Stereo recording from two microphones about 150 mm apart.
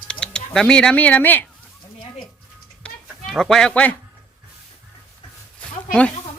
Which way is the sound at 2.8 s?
5° left (ahead or behind).